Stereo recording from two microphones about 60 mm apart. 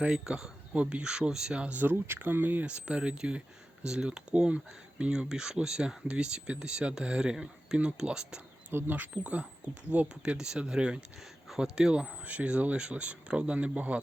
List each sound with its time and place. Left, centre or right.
0.0 s speech: centre; by 2.7 s right
2.8 s speech: centre
8.7 s speech: right
10.2 s speech: centre
12.2 s speech: right